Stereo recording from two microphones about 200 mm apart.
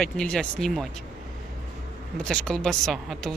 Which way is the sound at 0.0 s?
5° left (ahead or behind).